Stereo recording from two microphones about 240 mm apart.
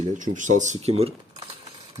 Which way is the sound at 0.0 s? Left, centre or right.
Right.